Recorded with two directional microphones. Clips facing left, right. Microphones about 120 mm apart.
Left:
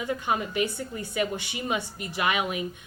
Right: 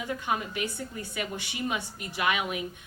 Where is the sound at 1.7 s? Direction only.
25° left (ahead or behind).